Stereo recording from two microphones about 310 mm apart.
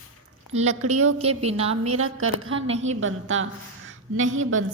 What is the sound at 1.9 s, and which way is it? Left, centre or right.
Speech, right.